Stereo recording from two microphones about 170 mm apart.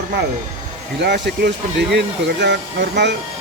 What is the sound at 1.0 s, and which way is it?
Speech, 85° right.